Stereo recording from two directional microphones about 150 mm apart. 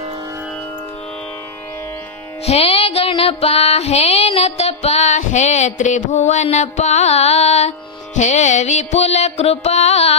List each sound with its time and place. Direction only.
2.4 s music: 45° left (ahead or behind)